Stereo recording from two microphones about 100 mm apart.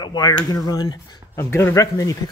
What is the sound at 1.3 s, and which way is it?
Speech, 25° left (ahead or behind).